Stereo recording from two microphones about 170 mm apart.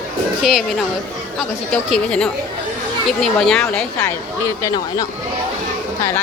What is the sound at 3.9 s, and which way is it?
Speech, 20° left (ahead or behind).